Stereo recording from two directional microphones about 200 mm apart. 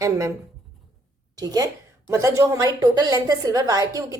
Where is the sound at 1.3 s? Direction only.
20° right (ahead or behind).